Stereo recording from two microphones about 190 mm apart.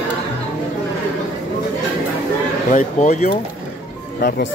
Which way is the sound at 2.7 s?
40° left (ahead or behind).